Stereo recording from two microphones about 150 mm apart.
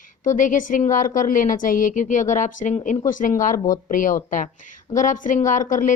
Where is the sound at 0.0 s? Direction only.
60° left (ahead or behind).